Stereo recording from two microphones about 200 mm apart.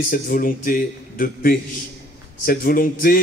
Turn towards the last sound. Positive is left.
turn(degrees=45)  # may be behind; listen again after turning